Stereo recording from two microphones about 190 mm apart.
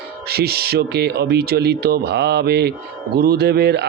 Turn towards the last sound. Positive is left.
turn(degrees=-60)  # may be behind; listen again after turning